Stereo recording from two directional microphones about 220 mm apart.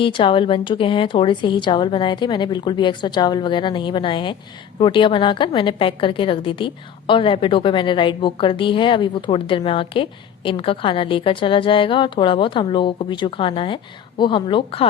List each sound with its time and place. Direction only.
0.0 s a woman's voice: 25° left (ahead or behind)